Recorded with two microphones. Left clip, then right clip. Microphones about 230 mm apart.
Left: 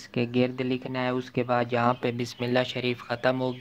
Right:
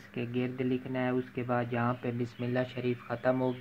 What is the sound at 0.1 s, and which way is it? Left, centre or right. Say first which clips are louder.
Speech: left 9 dB; left.